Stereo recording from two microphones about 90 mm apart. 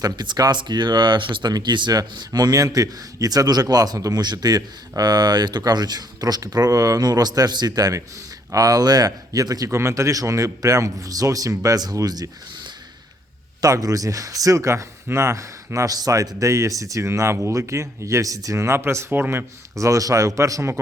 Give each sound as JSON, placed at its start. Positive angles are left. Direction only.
{"t": 0.0, "sound": "speech", "side_deg": -50}
{"t": 19.7, "sound": "speech", "side_deg": -40}